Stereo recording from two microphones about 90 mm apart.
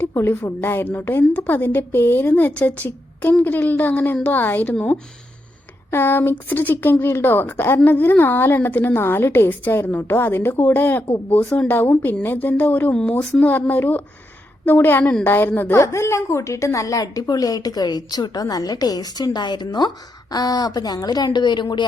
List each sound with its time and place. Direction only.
0.1 s a woman's voice: 30° left (ahead or behind)
15.7 s a woman's voice: 35° left (ahead or behind); by 21.8 s 60° left (ahead or behind)